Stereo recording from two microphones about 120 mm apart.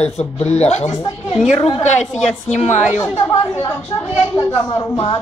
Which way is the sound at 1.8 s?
70° left (ahead or behind).